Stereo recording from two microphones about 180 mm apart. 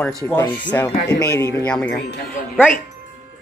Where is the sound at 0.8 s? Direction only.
20° left (ahead or behind).